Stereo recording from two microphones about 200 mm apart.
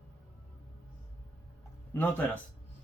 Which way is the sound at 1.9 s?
10° left (ahead or behind).